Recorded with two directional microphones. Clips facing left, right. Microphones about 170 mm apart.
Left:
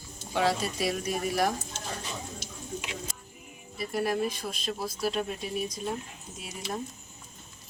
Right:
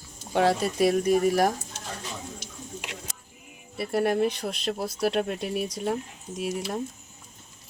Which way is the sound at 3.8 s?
65° right (ahead or behind).